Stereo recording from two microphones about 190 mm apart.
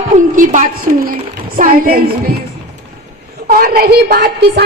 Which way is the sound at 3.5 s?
55° right (ahead or behind).